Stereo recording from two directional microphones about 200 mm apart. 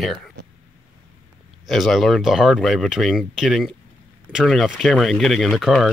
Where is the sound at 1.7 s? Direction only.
Centre (ahead or behind).